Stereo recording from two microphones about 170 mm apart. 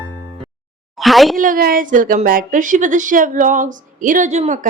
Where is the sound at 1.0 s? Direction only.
Centre (ahead or behind).